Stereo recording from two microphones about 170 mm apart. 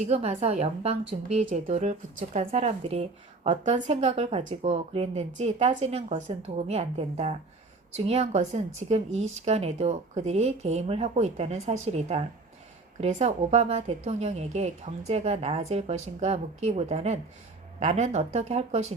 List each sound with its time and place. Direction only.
0.1 s speech: 40° right (ahead or behind)